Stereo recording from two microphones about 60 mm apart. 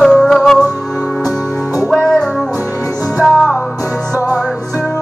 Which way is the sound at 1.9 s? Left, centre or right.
Centre.